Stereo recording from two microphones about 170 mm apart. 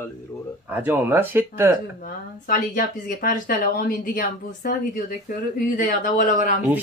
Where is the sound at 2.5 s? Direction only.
55° left (ahead or behind).